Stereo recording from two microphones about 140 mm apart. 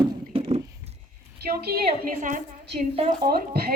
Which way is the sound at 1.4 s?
90° right.